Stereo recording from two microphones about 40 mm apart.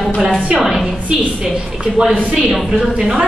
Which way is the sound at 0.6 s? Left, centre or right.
Centre.